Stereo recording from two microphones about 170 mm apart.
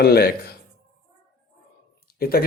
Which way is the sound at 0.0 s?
65° left (ahead or behind).